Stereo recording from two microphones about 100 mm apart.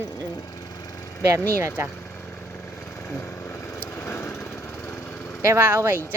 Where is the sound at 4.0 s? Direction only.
25° left (ahead or behind).